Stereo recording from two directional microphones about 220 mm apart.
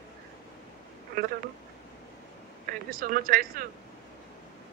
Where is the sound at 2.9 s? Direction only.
40° right (ahead or behind).